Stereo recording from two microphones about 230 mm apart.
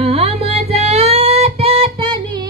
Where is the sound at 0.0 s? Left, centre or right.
Right.